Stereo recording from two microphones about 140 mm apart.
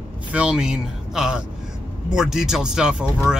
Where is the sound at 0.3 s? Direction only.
5° right (ahead or behind).